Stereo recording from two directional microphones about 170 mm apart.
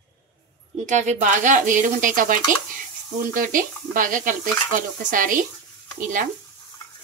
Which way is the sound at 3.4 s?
55° right (ahead or behind).